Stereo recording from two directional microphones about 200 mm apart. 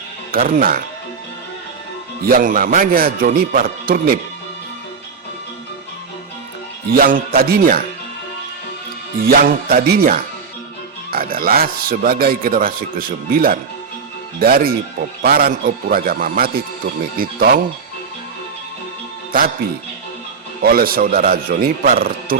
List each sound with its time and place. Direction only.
0.3 s speech: 45° right (ahead or behind)
2.2 s speech: 45° right (ahead or behind)
6.9 s speech: 45° right (ahead or behind)
9.2 s speech: 45° right (ahead or behind)
20.6 s speech: 50° right (ahead or behind)